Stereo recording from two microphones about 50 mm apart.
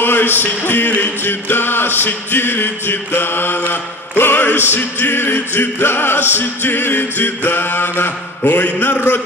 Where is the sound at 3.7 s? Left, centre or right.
Left.